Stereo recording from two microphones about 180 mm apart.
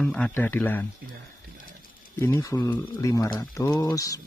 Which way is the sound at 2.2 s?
15° left (ahead or behind).